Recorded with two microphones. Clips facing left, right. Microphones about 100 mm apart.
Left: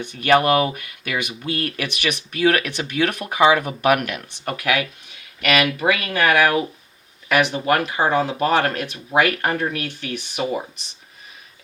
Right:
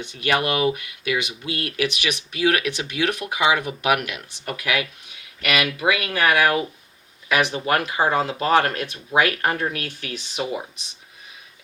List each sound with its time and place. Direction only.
0.0 s speech: 50° left (ahead or behind)